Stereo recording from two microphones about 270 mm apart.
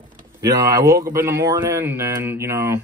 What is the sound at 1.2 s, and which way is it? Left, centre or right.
Speech, centre.